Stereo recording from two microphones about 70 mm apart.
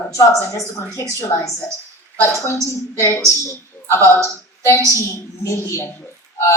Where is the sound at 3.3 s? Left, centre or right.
Left.